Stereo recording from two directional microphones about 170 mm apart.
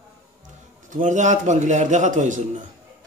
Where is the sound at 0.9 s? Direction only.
50° right (ahead or behind).